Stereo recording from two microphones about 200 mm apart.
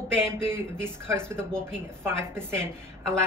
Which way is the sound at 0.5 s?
10° right (ahead or behind).